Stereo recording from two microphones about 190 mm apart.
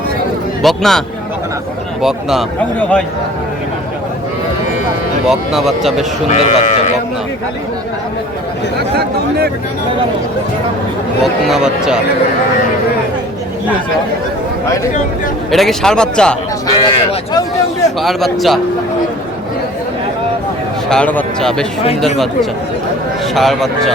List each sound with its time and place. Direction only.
0.6 s a man's voice: centre (ahead or behind)
5.2 s a man's voice: centre (ahead or behind)
6.2 s speech: 35° left (ahead or behind)
11.2 s a man's voice: centre (ahead or behind)
15.5 s a man's voice: centre (ahead or behind)
16.6 s speech: 20° left (ahead or behind)
18.0 s a man's voice: centre (ahead or behind)
20.9 s a man's voice: 10° left (ahead or behind)
23.3 s a man's voice: centre (ahead or behind)